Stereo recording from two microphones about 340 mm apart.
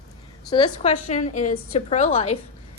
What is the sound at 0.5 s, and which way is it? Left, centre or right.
A woman's voice, centre.